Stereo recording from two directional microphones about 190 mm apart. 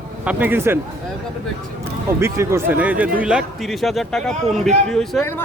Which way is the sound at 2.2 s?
15° right (ahead or behind).